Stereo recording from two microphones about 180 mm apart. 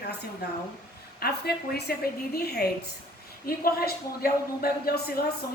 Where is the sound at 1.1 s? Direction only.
60° left (ahead or behind).